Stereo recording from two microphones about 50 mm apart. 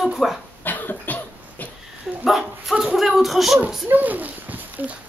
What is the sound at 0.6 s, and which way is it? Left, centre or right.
Cough, left.